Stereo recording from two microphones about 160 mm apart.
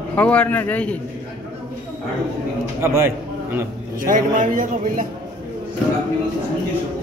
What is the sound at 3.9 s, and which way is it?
A man's voice, 60° right (ahead or behind).